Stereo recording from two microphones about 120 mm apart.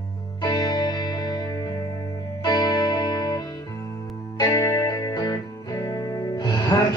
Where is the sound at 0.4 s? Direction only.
35° left (ahead or behind).